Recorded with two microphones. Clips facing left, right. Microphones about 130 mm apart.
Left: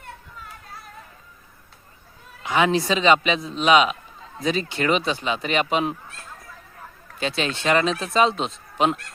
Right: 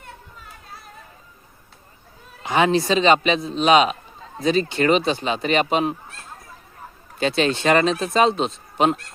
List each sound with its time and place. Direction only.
2.4 s speech: 35° right (ahead or behind)
7.2 s speech: 45° right (ahead or behind)